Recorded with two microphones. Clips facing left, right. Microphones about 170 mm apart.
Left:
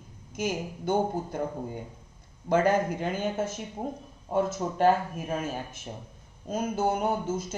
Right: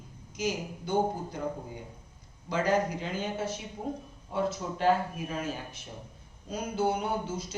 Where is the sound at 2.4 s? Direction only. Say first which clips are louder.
Left 4 dB; 55° left (ahead or behind).